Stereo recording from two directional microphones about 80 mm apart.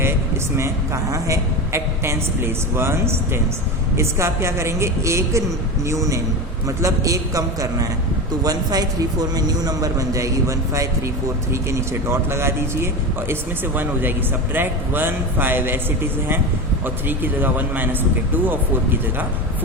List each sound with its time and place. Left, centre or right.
0.0 s a sound: right
1.1 s a man's voice: right
14.5 s a man's voice: right
16.8 s a man's voice: right